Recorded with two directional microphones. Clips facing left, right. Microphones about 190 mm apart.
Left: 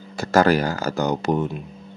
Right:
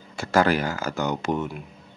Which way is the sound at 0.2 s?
40° left (ahead or behind).